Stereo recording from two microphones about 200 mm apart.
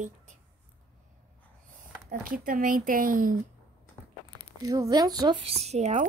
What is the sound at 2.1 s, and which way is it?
Speech, 45° right (ahead or behind).